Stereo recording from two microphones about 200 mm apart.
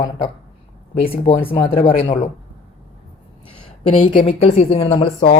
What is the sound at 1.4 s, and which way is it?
Speech, 25° left (ahead or behind).